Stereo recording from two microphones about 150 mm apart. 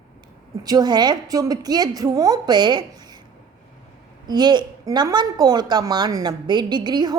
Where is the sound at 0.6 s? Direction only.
25° right (ahead or behind).